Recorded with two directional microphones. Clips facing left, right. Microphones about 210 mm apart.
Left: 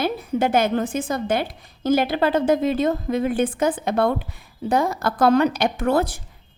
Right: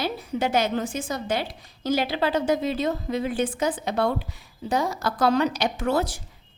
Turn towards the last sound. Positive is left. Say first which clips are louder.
# left 4 dB
turn(degrees=55)  # may be behind; listen again after turning